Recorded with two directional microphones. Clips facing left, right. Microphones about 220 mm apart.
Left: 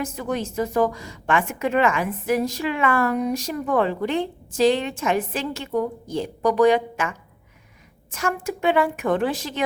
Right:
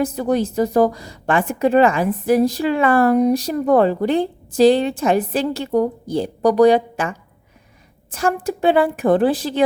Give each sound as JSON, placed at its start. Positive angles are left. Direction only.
{"t": 0.0, "sound": "a woman's voice", "side_deg": -35}